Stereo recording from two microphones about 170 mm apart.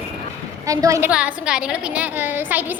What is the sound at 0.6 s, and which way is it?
Speech, 20° right (ahead or behind).